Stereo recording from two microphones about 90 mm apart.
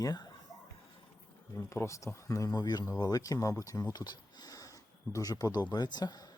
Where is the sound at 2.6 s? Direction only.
50° left (ahead or behind).